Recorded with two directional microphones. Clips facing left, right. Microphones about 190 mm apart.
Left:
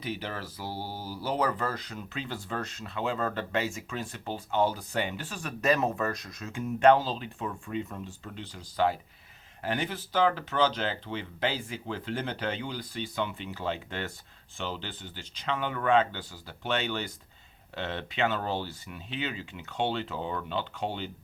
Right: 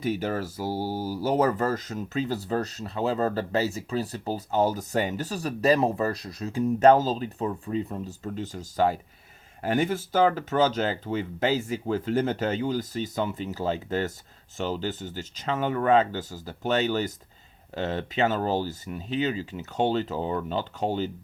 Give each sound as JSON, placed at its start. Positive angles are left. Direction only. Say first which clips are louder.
{"t": 0.0, "sound": "speech", "louder": "right 8 dB", "side_deg": -45}